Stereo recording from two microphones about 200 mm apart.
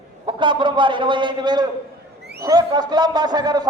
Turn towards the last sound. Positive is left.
turn(degrees=-20)  # may be behind; listen again after turning